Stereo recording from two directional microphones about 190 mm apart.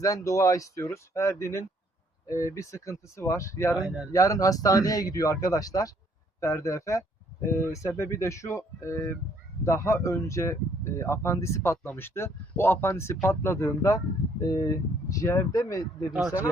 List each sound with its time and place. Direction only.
0.0 s speech: 15° left (ahead or behind)
3.8 s speech: 5° right (ahead or behind)
4.1 s speech: 15° left (ahead or behind)